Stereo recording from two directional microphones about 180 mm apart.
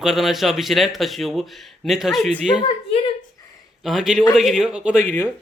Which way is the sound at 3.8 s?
Centre (ahead or behind).